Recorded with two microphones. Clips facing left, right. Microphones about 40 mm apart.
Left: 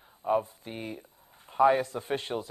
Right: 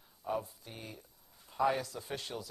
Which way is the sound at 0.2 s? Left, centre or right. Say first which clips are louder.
Left 9 dB; left.